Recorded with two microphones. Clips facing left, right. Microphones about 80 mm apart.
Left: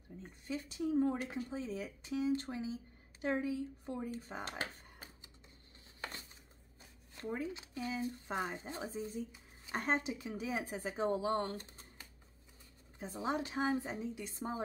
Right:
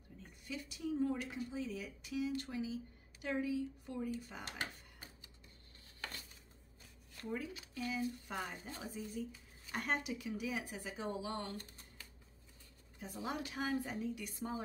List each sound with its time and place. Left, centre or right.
0.2 s speech: left
4.1 s a sound: left
6.8 s speech: left
11.5 s typing: left
13.0 s speech: left